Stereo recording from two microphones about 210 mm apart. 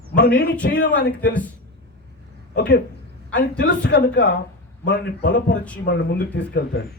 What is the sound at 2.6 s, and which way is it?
Speech, 55° left (ahead or behind).